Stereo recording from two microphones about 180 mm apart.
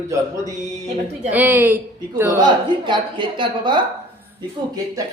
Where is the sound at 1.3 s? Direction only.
10° right (ahead or behind).